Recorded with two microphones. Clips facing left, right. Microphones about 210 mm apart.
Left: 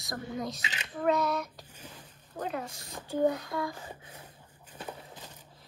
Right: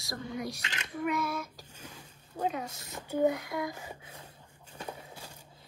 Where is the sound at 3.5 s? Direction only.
20° right (ahead or behind).